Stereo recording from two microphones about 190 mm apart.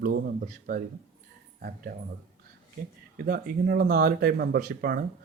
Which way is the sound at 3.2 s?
50° right (ahead or behind).